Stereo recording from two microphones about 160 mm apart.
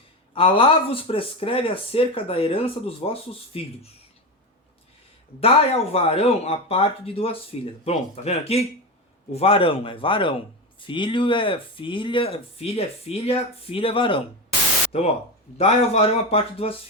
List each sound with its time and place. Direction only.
0.3 s a man's voice: 35° left (ahead or behind)
5.9 s a man's voice: 40° left (ahead or behind)